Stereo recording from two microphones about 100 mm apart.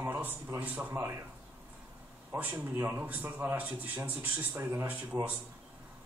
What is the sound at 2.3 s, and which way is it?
A man's voice, 20° right (ahead or behind).